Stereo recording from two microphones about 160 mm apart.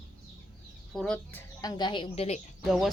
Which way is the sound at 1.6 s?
25° left (ahead or behind).